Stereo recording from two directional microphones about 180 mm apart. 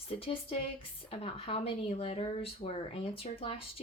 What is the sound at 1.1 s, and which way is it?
Speech, 35° left (ahead or behind).